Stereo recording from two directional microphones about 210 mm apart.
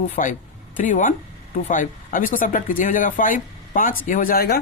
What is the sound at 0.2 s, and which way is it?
Speech, 40° left (ahead or behind).